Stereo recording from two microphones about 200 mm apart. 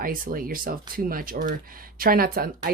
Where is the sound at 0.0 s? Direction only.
45° right (ahead or behind).